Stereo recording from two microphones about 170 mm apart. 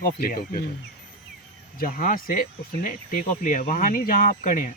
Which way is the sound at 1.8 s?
55° left (ahead or behind).